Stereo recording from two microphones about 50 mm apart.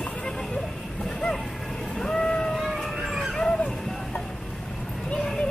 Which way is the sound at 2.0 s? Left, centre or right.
Centre.